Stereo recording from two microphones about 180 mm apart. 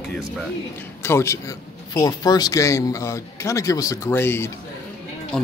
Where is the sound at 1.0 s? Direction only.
15° left (ahead or behind).